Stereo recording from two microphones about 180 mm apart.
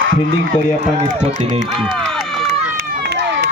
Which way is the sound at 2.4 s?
70° right (ahead or behind).